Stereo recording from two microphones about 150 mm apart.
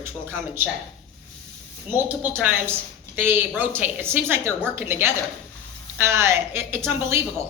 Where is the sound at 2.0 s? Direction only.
10° right (ahead or behind).